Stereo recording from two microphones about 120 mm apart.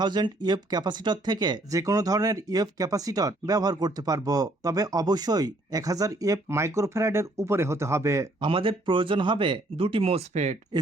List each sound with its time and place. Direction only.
0.0 s speech: 35° right (ahead or behind)
8.4 s speech: 45° right (ahead or behind)
10.3 s speech: 75° right (ahead or behind)